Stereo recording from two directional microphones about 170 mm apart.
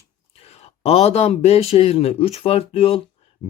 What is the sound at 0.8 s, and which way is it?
Speech, 35° left (ahead or behind).